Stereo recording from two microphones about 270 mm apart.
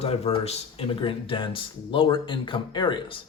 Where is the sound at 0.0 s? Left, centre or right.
Left.